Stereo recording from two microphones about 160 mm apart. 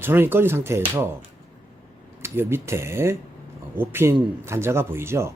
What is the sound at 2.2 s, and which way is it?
Speech, 15° right (ahead or behind).